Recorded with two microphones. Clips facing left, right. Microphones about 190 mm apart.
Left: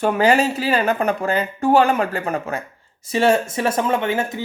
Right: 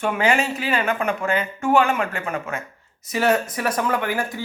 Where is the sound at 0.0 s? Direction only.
35° left (ahead or behind).